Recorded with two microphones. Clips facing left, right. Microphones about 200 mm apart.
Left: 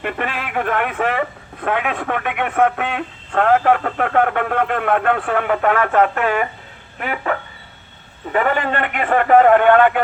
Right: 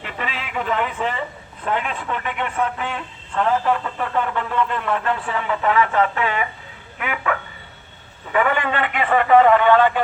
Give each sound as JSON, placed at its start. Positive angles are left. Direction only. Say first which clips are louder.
{"t": 0.0, "sound": "a man's voice", "louder": "left 6 dB", "side_deg": 55}
{"t": 7.0, "sound": "a man's voice", "louder": "left 2 dB", "side_deg": 40}